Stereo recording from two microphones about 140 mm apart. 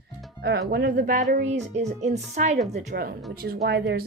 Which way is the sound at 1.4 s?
55° right (ahead or behind).